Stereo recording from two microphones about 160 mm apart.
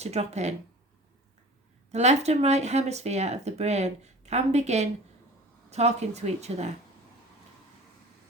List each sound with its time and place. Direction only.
0.0 s speech: 40° right (ahead or behind)
1.9 s speech: 45° right (ahead or behind)